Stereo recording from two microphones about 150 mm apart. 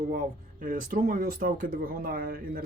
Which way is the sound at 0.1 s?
65° right (ahead or behind).